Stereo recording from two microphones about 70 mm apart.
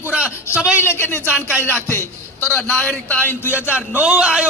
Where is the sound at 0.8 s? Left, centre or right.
Left.